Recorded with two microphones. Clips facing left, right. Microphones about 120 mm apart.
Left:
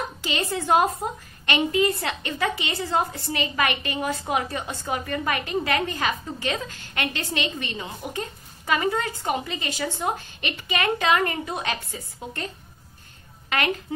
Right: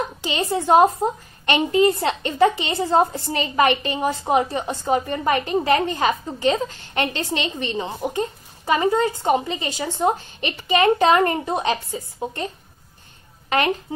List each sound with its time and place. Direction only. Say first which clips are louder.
0.2 s a woman's voice: right 4 dB; 25° right (ahead or behind)
13.5 s speech: right 5 dB; 30° right (ahead or behind)